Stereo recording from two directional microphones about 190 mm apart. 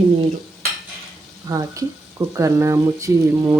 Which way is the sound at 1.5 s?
20° right (ahead or behind).